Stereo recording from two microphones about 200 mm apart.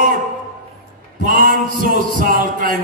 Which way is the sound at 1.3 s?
45° right (ahead or behind).